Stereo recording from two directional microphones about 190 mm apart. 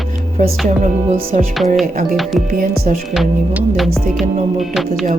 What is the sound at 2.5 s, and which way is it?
Speech, 45° right (ahead or behind).